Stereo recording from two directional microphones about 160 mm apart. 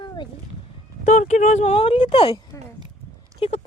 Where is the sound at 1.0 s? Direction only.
50° left (ahead or behind); by 2.4 s 30° left (ahead or behind).